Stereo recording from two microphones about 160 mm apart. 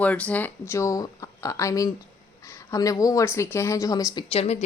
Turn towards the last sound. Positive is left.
turn(degrees=25)  # may be behind; listen again after turning